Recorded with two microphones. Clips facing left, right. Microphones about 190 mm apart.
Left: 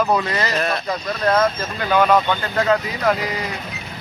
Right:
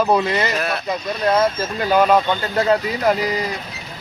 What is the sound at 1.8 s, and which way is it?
Speech, 30° right (ahead or behind).